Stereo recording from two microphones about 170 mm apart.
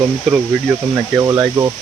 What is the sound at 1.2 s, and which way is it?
Speech, 15° right (ahead or behind).